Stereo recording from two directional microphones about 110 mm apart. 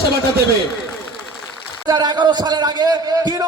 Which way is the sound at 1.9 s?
40° right (ahead or behind).